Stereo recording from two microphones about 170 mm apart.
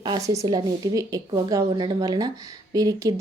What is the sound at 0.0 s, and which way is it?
A woman's voice, 20° right (ahead or behind).